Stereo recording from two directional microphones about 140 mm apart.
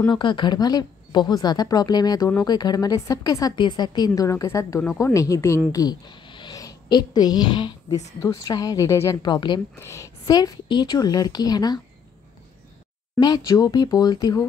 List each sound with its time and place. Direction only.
0.1 s a woman's voice: 35° left (ahead or behind)
9.2 s a woman's voice: 30° left (ahead or behind)
9.8 s a woman's voice: 20° left (ahead or behind)
13.2 s a woman's voice: 30° left (ahead or behind)